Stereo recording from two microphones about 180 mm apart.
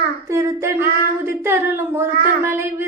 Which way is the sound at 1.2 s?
15° right (ahead or behind).